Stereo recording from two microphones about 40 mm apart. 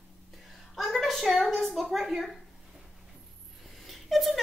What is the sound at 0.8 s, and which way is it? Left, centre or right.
A woman's voice, centre.